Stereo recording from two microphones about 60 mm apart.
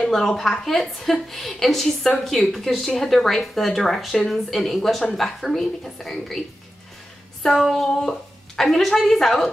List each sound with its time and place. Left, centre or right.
0.0 s a woman's voice: centre
7.4 s a woman's voice: centre